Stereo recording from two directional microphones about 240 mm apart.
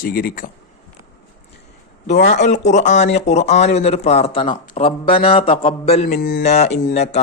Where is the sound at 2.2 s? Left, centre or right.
Left.